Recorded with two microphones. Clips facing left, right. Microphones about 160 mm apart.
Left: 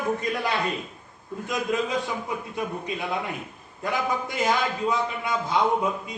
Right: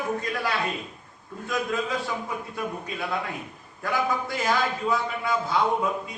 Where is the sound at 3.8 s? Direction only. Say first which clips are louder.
Even; 20° left (ahead or behind).